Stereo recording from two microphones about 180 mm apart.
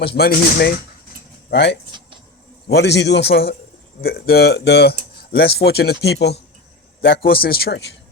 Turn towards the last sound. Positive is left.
turn(degrees=60)  # may be behind; listen again after turning